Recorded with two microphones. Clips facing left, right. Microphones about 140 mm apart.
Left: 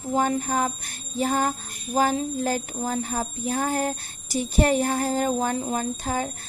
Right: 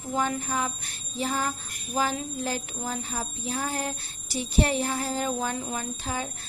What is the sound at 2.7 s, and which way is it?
A woman's voice, 45° left (ahead or behind).